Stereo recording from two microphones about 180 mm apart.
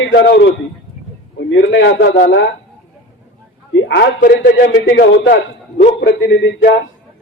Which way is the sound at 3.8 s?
80° left.